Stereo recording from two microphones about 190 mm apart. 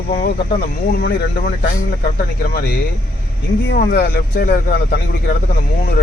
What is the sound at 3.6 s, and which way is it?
Speech, 55° left (ahead or behind).